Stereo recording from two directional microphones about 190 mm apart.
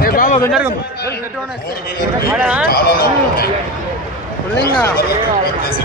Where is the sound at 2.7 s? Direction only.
50° left (ahead or behind).